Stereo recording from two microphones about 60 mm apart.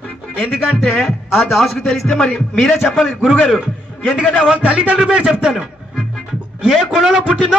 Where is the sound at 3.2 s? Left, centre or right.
Centre.